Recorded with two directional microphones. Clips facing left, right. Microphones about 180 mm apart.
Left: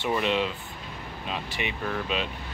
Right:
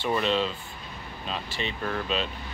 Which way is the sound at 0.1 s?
15° left (ahead or behind).